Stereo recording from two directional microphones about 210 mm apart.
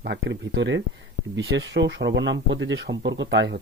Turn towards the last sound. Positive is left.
turn(degrees=-55)  # may be behind; listen again after turning